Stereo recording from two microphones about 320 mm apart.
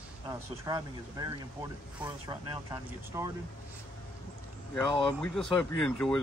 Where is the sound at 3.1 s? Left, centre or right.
Centre.